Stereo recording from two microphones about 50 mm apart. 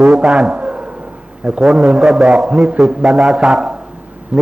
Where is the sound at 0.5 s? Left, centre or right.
Right.